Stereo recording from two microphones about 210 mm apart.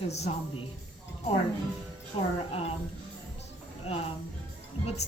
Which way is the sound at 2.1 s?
25° left (ahead or behind).